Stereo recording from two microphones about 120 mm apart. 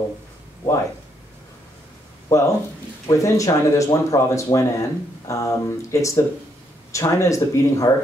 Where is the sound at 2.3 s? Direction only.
25° left (ahead or behind).